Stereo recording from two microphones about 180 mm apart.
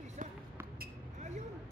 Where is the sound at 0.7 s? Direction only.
40° right (ahead or behind).